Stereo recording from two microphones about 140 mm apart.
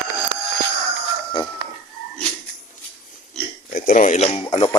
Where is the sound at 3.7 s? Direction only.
70° left (ahead or behind); by 4.6 s 50° left (ahead or behind).